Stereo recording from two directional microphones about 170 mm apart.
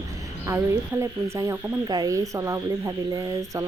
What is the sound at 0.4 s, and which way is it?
Speech, 15° right (ahead or behind).